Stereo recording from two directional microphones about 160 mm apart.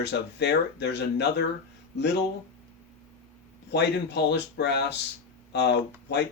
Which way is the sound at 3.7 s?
90° left.